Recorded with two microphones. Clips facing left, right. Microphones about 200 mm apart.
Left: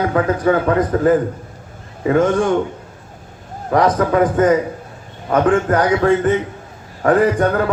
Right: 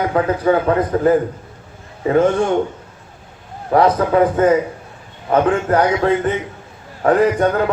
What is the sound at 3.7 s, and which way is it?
Speech, 30° right (ahead or behind).